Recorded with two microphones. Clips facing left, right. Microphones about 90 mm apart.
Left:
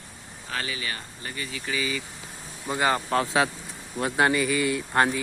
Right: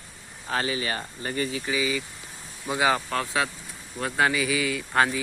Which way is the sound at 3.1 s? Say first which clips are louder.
Left 4 dB; 25° left (ahead or behind).